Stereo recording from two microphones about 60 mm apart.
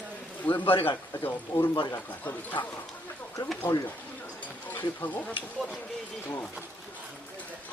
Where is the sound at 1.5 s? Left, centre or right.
Left.